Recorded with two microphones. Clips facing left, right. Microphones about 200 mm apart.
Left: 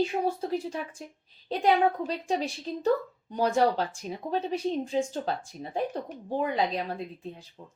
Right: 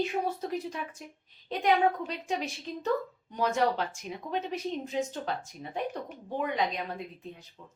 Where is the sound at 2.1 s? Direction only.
35° left (ahead or behind).